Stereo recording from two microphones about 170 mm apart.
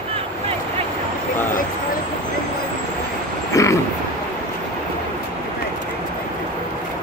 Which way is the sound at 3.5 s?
20° left (ahead or behind).